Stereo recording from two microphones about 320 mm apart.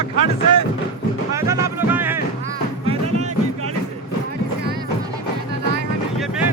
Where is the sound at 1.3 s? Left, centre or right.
Centre.